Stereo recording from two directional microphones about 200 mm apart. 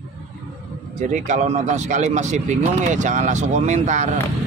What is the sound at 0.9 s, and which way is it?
Speech, 35° right (ahead or behind).